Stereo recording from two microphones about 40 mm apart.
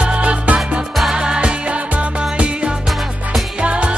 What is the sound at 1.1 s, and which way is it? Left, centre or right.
Music, right.